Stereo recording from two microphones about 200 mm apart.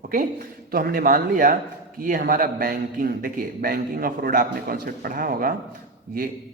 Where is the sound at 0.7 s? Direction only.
45° right (ahead or behind).